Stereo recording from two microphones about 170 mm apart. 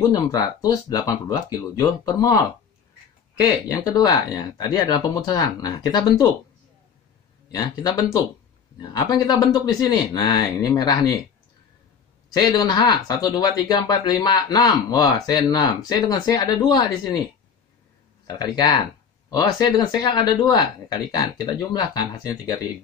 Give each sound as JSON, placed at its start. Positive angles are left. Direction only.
{"t": 0.1, "sound": "speech", "side_deg": 20}
{"t": 7.5, "sound": "speech", "side_deg": 25}
{"t": 12.4, "sound": "speech", "side_deg": 25}
{"t": 18.4, "sound": "speech", "side_deg": 25}